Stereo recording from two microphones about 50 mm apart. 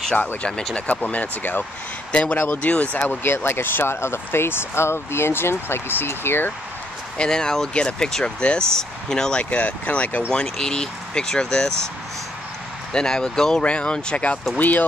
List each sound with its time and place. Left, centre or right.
0.4 s speech: centre
3.3 s speech: left
7.2 s speech: centre
9.4 s speech: left
10.3 s speech: centre
12.9 s speech: centre
14.6 s speech: left